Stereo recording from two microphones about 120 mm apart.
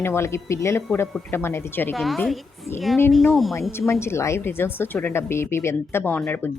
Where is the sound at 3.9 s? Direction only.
20° left (ahead or behind).